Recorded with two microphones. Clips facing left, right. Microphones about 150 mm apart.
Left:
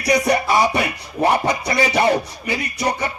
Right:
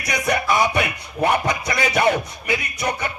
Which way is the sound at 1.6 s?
35° left (ahead or behind).